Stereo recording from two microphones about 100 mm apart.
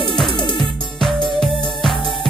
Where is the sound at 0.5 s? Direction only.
Centre (ahead or behind).